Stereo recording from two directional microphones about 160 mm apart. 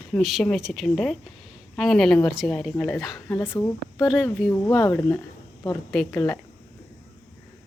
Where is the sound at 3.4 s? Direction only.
15° left (ahead or behind).